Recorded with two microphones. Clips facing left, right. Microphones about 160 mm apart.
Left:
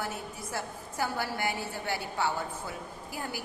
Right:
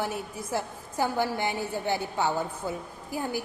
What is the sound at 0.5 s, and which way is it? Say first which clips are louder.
A woman's voice: right 6 dB; 20° right (ahead or behind).